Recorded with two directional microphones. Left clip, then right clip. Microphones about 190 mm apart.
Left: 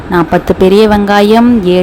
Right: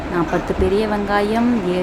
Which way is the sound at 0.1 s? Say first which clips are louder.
Left 11 dB; 50° left (ahead or behind).